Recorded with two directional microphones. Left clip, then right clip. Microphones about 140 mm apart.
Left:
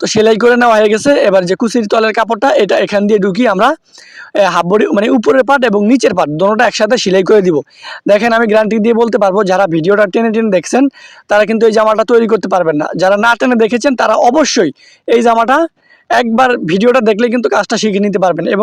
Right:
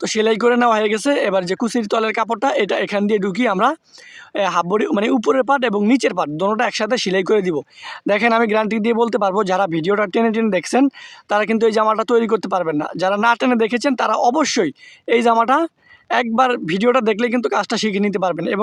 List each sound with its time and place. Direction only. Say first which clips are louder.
0.0 s speech: left 8 dB; 35° left (ahead or behind)